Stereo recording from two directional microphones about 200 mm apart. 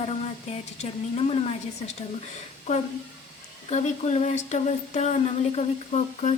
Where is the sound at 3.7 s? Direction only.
35° left (ahead or behind).